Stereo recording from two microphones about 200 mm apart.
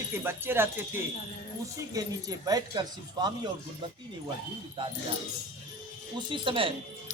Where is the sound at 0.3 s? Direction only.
10° right (ahead or behind).